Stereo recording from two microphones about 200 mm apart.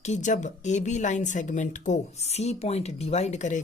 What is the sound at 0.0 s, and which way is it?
A woman's voice, 35° left (ahead or behind).